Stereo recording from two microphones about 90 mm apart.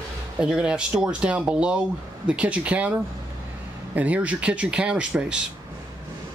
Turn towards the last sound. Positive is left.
turn(degrees=-10)  # may be behind; listen again after turning